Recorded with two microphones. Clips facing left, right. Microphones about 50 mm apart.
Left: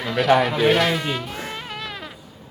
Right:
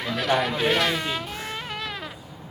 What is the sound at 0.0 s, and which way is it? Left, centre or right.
Music, centre.